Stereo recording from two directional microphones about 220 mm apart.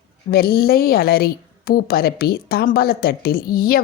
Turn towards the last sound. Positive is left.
turn(degrees=45)  # may be behind; listen again after turning